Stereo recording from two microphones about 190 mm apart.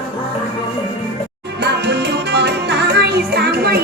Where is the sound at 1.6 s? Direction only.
60° right (ahead or behind).